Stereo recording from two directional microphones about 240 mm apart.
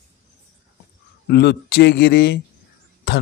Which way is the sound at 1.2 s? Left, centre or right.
Left.